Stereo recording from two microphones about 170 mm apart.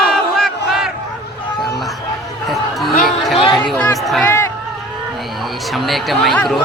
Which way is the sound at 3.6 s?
5° left (ahead or behind).